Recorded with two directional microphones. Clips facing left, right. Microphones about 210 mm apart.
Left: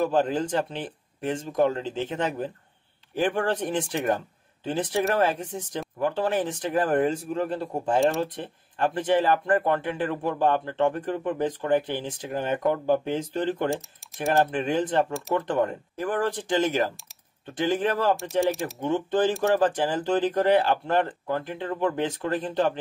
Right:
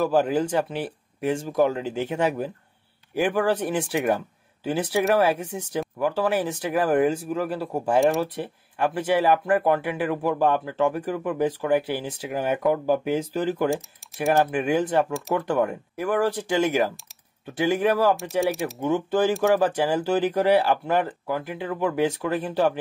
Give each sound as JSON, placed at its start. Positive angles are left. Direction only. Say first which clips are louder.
{"t": 0.0, "sound": "speech", "louder": "right 2 dB", "side_deg": -10}